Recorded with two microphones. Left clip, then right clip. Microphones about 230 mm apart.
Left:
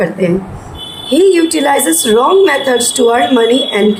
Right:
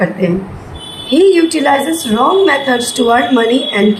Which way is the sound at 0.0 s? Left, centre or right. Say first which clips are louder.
Left 2 dB; left.